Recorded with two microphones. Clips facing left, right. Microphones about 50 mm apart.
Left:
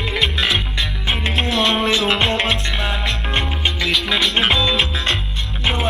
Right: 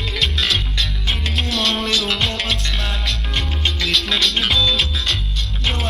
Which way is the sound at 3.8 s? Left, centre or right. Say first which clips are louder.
Left 1 dB; centre.